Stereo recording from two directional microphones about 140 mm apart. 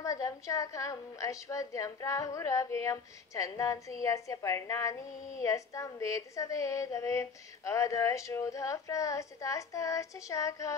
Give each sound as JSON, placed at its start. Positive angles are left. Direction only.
{"t": 0.0, "sound": "speech", "side_deg": 25}